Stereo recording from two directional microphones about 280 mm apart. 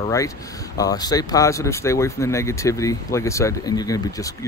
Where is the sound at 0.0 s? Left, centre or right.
Centre.